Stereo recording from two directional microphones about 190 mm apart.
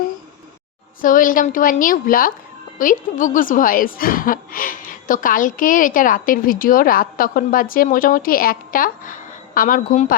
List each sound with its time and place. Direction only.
1.0 s a woman's voice: 45° left (ahead or behind)